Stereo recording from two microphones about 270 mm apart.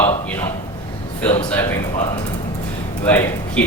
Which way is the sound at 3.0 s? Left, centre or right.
Centre.